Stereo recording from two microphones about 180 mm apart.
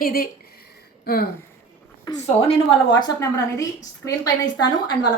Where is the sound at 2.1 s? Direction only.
20° left (ahead or behind).